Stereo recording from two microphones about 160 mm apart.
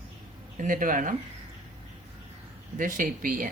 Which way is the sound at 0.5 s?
55° right (ahead or behind).